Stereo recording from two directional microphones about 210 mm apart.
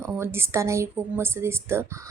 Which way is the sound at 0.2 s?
10° right (ahead or behind).